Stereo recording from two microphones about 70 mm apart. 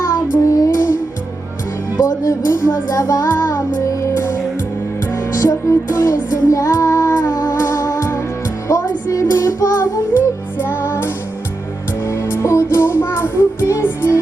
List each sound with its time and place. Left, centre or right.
0.0 s child singing: left
2.0 s music: left
7.1 s music: left
10.6 s music: left